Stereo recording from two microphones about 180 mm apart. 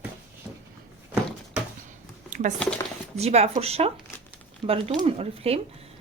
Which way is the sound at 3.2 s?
35° right (ahead or behind).